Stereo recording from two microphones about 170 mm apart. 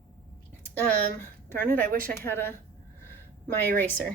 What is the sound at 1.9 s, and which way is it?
Speech, 55° right (ahead or behind).